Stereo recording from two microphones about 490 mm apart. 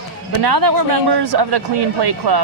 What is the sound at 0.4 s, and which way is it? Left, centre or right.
Speech, right.